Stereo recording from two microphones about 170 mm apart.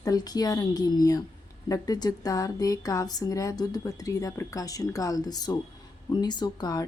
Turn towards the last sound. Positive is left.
turn(degrees=20)  # may be behind; listen again after turning